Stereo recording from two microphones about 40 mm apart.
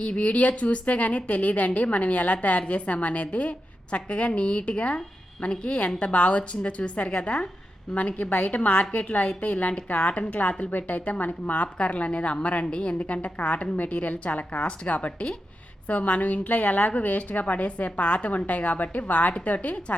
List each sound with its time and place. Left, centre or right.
0.2 s a woman's voice: left